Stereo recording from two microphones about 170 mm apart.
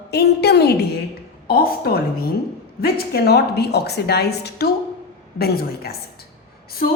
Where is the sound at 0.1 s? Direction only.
75° left (ahead or behind).